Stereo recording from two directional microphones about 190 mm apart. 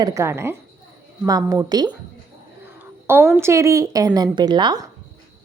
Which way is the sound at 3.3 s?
15° right (ahead or behind).